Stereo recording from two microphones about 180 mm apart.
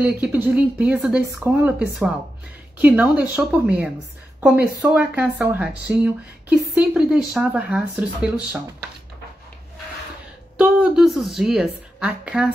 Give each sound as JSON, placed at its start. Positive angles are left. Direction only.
{"t": 0.0, "sound": "speech", "side_deg": -10}
{"t": 10.6, "sound": "a woman's voice", "side_deg": -5}